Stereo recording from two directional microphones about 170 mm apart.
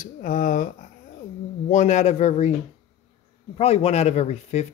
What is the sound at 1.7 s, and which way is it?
Speech, 45° left (ahead or behind).